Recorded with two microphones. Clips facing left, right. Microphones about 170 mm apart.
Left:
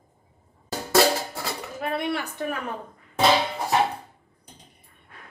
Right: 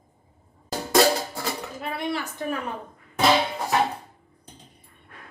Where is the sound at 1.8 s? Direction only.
55° left (ahead or behind).